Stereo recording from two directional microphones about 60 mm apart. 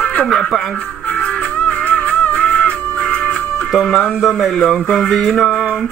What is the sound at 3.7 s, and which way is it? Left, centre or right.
Speech, centre.